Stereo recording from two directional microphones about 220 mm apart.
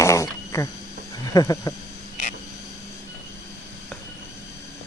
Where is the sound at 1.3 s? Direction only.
15° left (ahead or behind).